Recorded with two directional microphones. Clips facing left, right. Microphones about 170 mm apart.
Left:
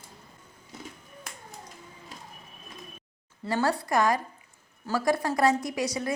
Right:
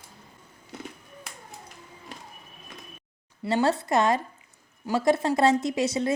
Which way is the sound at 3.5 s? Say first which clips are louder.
Right 3 dB; 25° right (ahead or behind).